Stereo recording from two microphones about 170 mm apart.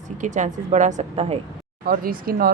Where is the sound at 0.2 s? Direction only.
45° right (ahead or behind).